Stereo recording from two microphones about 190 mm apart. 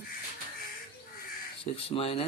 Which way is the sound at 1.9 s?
30° left (ahead or behind).